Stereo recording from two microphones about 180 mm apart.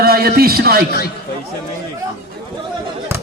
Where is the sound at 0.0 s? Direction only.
60° right (ahead or behind).